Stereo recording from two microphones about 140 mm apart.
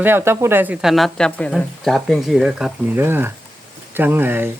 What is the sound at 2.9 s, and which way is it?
Speech, 15° right (ahead or behind).